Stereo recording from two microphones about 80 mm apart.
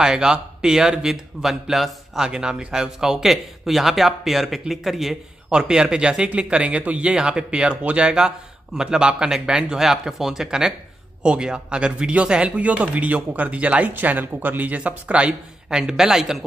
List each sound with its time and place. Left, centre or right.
0.0 s speech: centre